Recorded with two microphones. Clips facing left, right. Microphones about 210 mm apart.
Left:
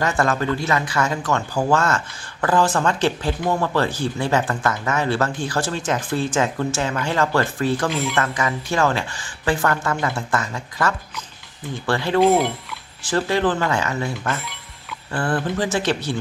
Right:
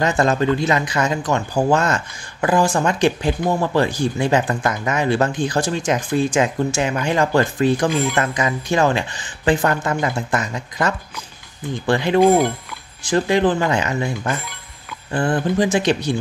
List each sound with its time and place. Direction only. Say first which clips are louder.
0.0 s speech: right 3 dB; 20° right (ahead or behind)
7.9 s speech: right 4 dB; centre (ahead or behind)
8.2 s speech: right 2 dB; 20° right (ahead or behind)
12.2 s speech: right 2 dB; centre (ahead or behind)
13.0 s speech: right 3 dB; 15° right (ahead or behind)